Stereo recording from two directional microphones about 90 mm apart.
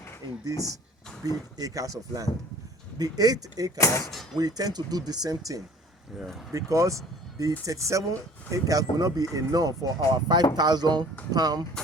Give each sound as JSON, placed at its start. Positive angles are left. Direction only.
{"t": 0.4, "sound": "speech", "side_deg": -40}
{"t": 3.8, "sound": "speech", "side_deg": 35}
{"t": 4.4, "sound": "speech", "side_deg": -45}